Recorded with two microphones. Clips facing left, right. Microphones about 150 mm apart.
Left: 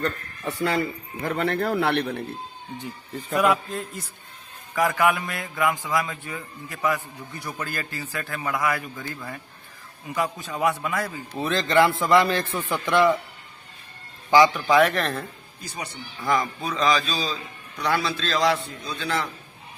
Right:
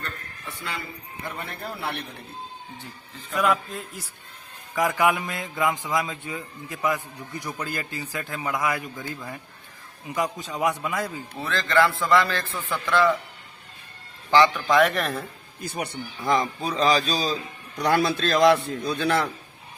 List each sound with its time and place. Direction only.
1.2 s a man's voice: 85° left; by 2.2 s 65° left (ahead or behind)
3.3 s a man's voice: 5° left (ahead or behind)
4.7 s a man's voice: 15° right (ahead or behind)
11.3 s a man's voice: 20° left (ahead or behind)
14.3 s speech: 10° left (ahead or behind)
14.8 s a man's voice: centre (ahead or behind)
15.6 s speech: 55° right (ahead or behind)
16.2 s a man's voice: 25° right (ahead or behind); by 19.3 s 65° right (ahead or behind)